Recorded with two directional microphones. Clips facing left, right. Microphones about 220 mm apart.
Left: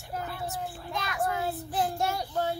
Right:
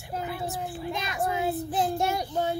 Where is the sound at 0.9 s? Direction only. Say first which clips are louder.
Even; 20° right (ahead or behind).